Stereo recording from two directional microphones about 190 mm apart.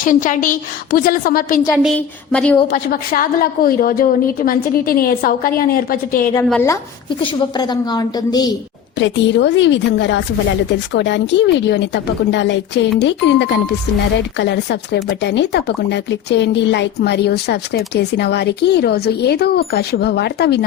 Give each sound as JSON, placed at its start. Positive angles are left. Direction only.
{"t": 0.0, "sound": "a woman's voice", "side_deg": 45}
{"t": 2.0, "sound": "speech", "side_deg": 5}
{"t": 2.7, "sound": "a woman's voice", "side_deg": 50}
{"t": 6.5, "sound": "speech", "side_deg": 10}
{"t": 7.1, "sound": "a woman's voice", "side_deg": 25}
{"t": 9.0, "sound": "speech", "side_deg": 70}